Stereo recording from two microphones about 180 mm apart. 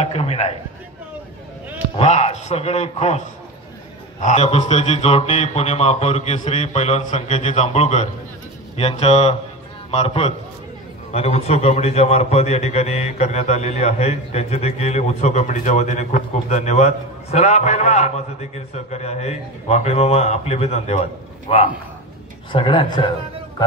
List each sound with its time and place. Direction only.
0.0 s a man's voice: 35° left (ahead or behind)
2.0 s a man's voice: 35° left (ahead or behind)
4.2 s a man's voice: 40° left (ahead or behind)